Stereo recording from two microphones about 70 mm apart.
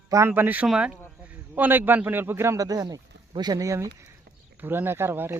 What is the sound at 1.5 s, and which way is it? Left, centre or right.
A man's voice, right.